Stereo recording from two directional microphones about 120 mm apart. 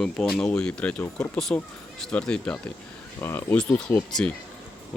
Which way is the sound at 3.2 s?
20° left (ahead or behind).